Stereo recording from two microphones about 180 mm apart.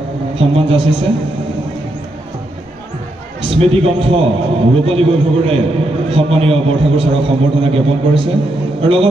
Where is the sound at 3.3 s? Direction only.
35° right (ahead or behind).